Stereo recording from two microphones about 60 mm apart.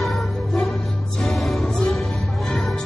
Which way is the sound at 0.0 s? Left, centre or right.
Centre.